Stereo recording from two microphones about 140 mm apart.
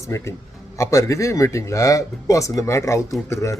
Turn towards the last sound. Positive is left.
turn(degrees=20)  # may be behind; listen again after turning